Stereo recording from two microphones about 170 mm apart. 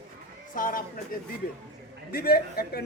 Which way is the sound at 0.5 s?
55° left (ahead or behind).